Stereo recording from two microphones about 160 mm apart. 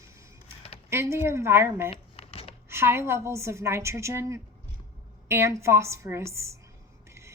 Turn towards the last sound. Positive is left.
turn(degrees=-15)  # may be behind; listen again after turning